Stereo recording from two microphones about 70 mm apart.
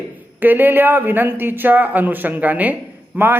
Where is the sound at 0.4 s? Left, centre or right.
Right.